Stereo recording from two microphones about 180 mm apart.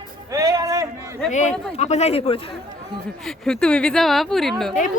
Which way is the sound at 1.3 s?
40° left (ahead or behind).